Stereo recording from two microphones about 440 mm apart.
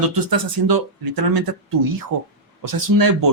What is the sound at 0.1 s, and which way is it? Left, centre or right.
Speech, right.